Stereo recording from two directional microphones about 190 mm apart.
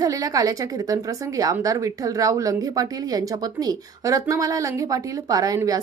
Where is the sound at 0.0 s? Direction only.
20° right (ahead or behind).